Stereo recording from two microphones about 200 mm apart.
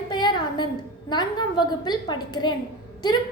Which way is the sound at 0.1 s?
20° left (ahead or behind).